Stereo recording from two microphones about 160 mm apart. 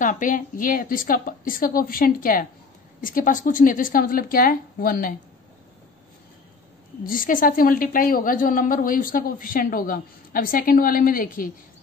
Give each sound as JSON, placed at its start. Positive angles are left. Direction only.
{"t": 0.0, "sound": "a woman's voice", "side_deg": 55}
{"t": 7.1, "sound": "a woman's voice", "side_deg": 60}